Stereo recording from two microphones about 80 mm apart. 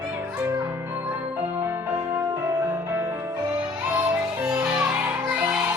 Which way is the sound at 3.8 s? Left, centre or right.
Right.